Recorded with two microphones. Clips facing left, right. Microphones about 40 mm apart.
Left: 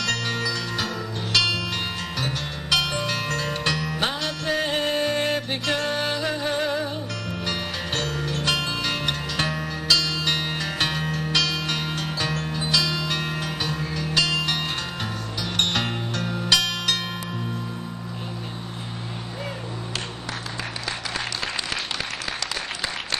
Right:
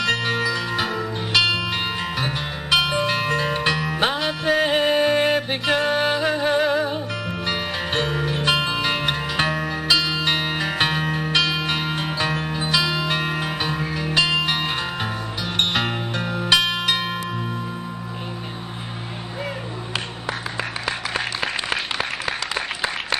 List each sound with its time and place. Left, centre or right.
0.0 s music: centre